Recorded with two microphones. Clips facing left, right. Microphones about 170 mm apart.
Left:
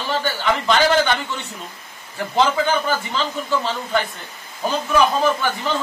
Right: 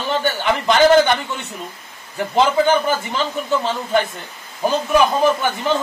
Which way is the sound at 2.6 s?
20° right (ahead or behind).